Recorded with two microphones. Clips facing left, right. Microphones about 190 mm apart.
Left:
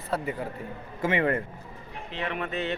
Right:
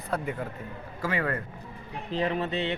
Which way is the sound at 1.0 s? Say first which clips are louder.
Left 4 dB; 25° left (ahead or behind).